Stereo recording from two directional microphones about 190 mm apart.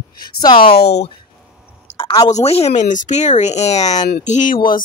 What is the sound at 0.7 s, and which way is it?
Speech, 60° left (ahead or behind).